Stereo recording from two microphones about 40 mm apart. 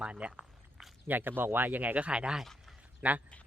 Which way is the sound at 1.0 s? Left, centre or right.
Right.